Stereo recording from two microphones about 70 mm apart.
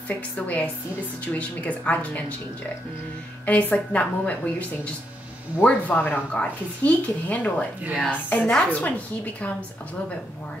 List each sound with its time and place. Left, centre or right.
1.2 s speech: centre
3.4 s speech: centre